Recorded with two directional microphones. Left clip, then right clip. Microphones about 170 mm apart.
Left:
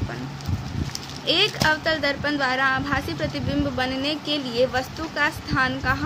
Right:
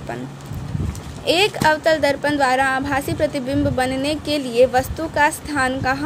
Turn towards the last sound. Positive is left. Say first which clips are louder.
# right 3 dB
turn(degrees=-15)  # may be behind; listen again after turning